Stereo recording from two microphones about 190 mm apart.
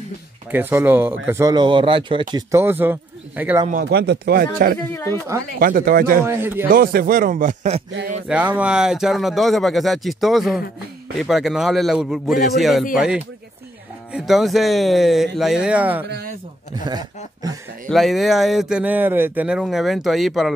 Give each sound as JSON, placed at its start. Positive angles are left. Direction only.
{"t": 0.5, "sound": "speech", "side_deg": -10}
{"t": 2.3, "sound": "speech", "side_deg": -15}
{"t": 3.8, "sound": "a man's voice", "side_deg": -60}
{"t": 6.2, "sound": "speech", "side_deg": -10}
{"t": 6.7, "sound": "a man's voice", "side_deg": -50}
{"t": 8.3, "sound": "speech", "side_deg": -5}
{"t": 16.1, "sound": "a man's voice", "side_deg": -55}
{"t": 16.7, "sound": "speech", "side_deg": -20}
{"t": 17.8, "sound": "speech", "side_deg": 0}